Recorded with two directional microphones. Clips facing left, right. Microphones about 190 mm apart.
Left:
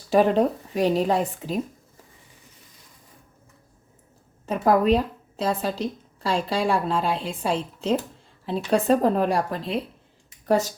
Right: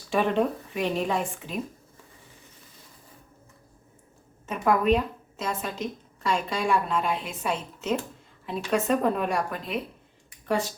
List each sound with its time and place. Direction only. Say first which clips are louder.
0.1 s a woman's voice: left 5 dB; 40° left (ahead or behind)
4.4 s a woman's voice: left 3 dB; 35° left (ahead or behind)
10.4 s speech: left 5 dB; 40° left (ahead or behind)